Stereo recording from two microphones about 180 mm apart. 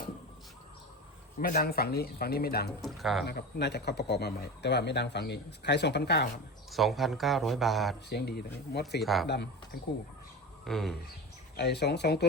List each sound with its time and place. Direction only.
1.4 s a man's voice: 55° left (ahead or behind)
2.8 s speech: centre (ahead or behind)
3.2 s speech: 65° left (ahead or behind)
6.7 s speech: centre (ahead or behind)
8.1 s a man's voice: 65° left (ahead or behind)
9.0 s speech: centre (ahead or behind)
9.2 s speech: 65° left (ahead or behind)
10.7 s speech: centre (ahead or behind)
11.5 s a man's voice: 65° left (ahead or behind)